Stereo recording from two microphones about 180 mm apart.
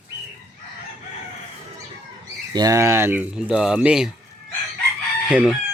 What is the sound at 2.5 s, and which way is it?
Speech, 20° right (ahead or behind).